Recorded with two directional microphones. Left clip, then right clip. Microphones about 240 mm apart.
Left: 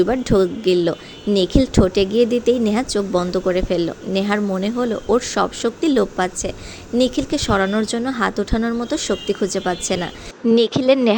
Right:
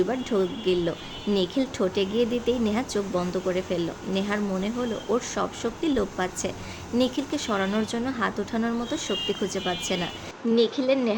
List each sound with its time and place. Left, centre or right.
0.0 s speech: left